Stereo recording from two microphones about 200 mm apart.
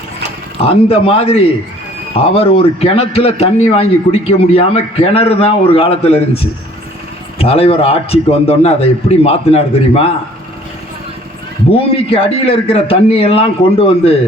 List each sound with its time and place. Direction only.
0.6 s a man's voice: 30° left (ahead or behind)
11.7 s a man's voice: 30° left (ahead or behind)